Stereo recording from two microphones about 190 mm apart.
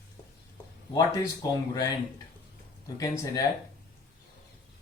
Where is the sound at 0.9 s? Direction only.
20° left (ahead or behind).